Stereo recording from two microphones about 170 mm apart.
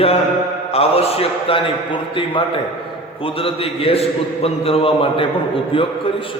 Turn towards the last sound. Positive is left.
turn(degrees=30)  # may be behind; listen again after turning